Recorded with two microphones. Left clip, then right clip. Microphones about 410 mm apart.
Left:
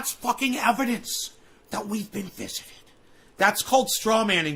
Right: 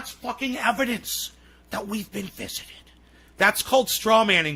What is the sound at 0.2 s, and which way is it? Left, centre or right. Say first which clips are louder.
Speech: left 4 dB; centre.